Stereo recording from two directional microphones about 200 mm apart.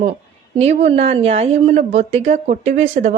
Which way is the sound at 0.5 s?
35° right (ahead or behind).